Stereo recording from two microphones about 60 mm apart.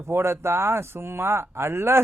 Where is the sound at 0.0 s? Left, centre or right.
Right.